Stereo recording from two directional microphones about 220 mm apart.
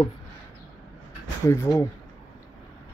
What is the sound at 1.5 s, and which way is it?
Speech, 15° left (ahead or behind).